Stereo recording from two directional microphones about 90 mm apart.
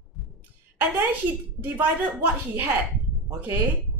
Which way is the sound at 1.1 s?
20° right (ahead or behind).